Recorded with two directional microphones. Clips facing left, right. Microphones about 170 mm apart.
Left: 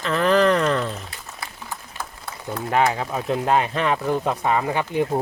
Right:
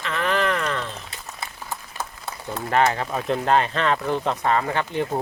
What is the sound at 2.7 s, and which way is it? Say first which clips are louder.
Speech: even; 5° left (ahead or behind).